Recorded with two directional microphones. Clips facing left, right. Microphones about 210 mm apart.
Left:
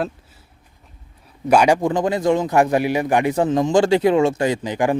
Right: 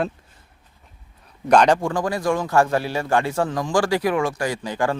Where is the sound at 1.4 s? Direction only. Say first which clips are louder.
Left 1 dB; 10° left (ahead or behind).